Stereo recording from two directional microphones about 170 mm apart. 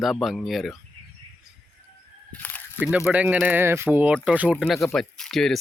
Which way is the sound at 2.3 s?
10° left (ahead or behind).